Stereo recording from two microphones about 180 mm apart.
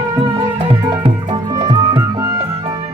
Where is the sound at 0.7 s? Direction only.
25° right (ahead or behind).